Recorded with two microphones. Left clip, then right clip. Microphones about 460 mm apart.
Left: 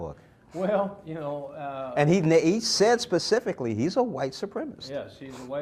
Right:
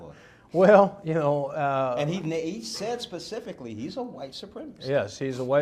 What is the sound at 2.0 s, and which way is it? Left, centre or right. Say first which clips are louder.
Speech: left 8 dB; left.